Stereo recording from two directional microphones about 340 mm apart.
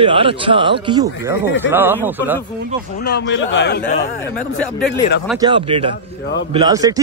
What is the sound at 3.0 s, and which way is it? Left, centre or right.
A man's voice, left.